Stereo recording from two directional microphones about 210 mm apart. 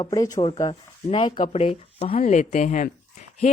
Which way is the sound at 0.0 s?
20° left (ahead or behind).